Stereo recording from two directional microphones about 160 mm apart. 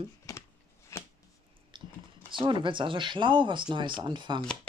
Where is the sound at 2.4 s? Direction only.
30° right (ahead or behind).